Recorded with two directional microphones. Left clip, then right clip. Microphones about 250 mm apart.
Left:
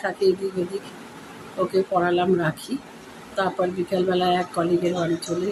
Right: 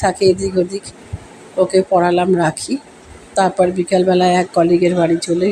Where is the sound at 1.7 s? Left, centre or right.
Right.